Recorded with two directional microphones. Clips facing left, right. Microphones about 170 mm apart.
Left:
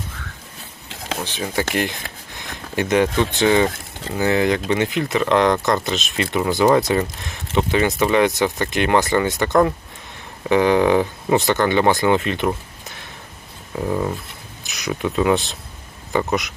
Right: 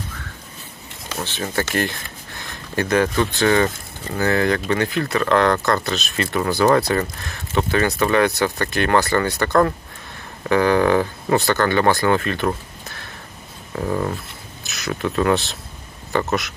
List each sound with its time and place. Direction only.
1.2 s speech: 15° left (ahead or behind)
12.5 s a sound: 15° left (ahead or behind)
13.7 s speech: 5° left (ahead or behind)